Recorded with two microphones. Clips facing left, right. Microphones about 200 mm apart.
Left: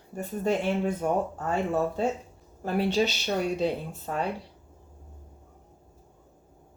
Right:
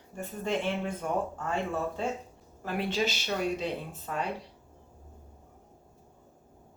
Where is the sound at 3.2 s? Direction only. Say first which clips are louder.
Left 4 dB; 30° left (ahead or behind).